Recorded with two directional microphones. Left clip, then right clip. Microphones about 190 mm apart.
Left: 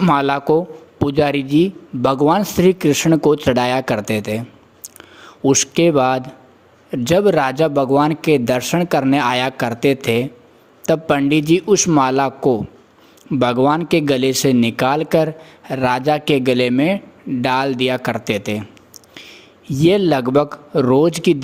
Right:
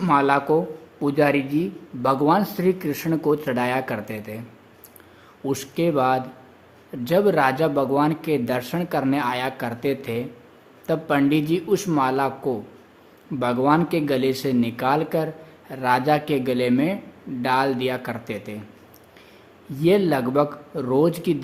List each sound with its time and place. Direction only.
0.0 s speech: 45° left (ahead or behind)
19.7 s speech: 40° left (ahead or behind)